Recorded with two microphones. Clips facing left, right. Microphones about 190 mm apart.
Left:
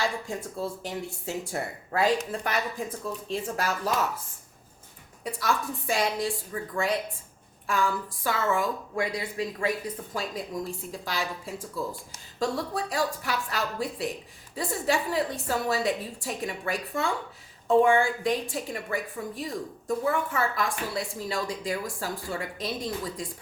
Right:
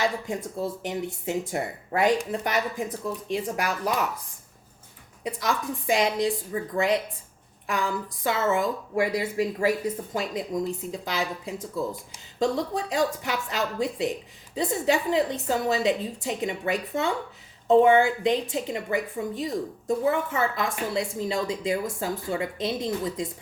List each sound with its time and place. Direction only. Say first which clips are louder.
0.6 s a woman's voice: right 3 dB; 20° right (ahead or behind)
5.2 s a woman's voice: right 1 dB; 20° right (ahead or behind)